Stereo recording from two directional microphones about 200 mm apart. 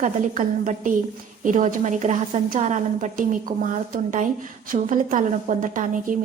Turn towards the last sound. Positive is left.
turn(degrees=-40)  # may be behind; listen again after turning